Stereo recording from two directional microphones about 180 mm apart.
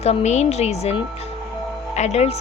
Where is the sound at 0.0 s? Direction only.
35° left (ahead or behind).